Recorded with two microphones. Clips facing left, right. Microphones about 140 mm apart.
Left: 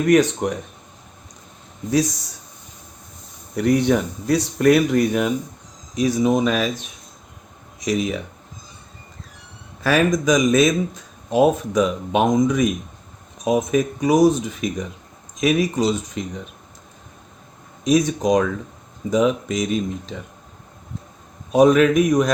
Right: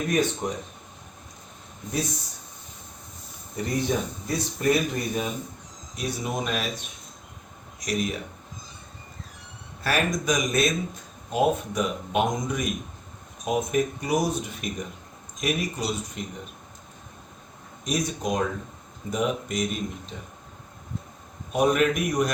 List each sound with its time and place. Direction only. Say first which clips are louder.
0.1 s speech: left 10 dB; 75° left (ahead or behind)
3.5 s speech: left 9 dB; 75° left (ahead or behind)
6.0 s speech: left 12 dB; 90° left
9.9 s speech: left 8 dB; 90° left
17.8 s speech: left 10 dB; 90° left
21.5 s speech: left 8 dB; 90° left